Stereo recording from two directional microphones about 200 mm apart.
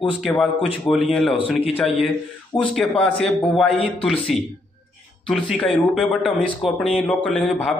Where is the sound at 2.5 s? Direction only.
20° left (ahead or behind).